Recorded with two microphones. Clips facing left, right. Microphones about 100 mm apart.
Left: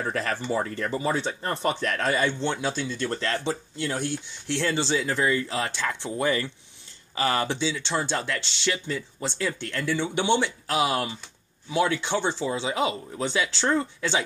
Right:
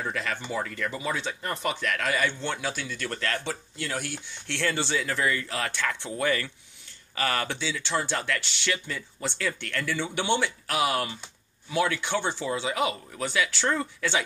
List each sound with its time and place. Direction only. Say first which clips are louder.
0.0 s speech: left 3 dB; 35° left (ahead or behind); by 14.2 s 20° left (ahead or behind)